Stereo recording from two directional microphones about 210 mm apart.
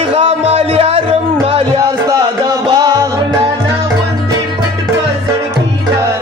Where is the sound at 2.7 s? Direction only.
15° right (ahead or behind).